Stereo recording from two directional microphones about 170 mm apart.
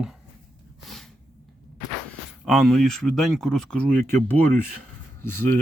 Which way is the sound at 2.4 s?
Centre (ahead or behind).